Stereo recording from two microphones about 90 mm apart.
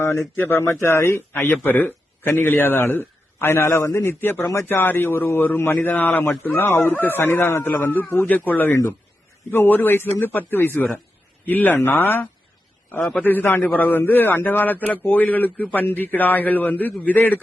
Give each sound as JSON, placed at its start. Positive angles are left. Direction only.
{"t": 0.0, "sound": "a man's voice", "side_deg": 30}
{"t": 13.0, "sound": "a man's voice", "side_deg": 10}
{"t": 13.2, "sound": "a man's voice", "side_deg": 20}